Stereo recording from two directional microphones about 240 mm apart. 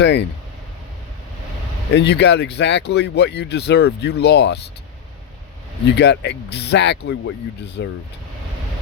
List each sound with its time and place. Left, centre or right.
0.0 s speech: left
1.9 s speech: left
6.0 s speech: left